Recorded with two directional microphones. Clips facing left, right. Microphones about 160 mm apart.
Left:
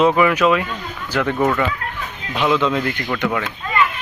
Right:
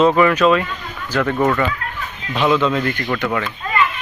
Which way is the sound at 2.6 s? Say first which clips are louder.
Right 1 dB; 15° left (ahead or behind).